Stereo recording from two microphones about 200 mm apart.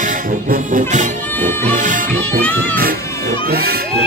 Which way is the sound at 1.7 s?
40° right (ahead or behind).